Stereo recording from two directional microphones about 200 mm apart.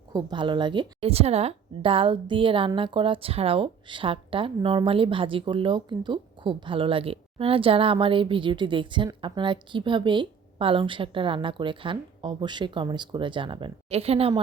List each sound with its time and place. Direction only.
0.1 s a woman's voice: 20° right (ahead or behind)